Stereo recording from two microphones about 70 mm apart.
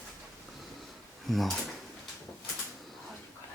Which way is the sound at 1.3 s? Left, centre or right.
Centre.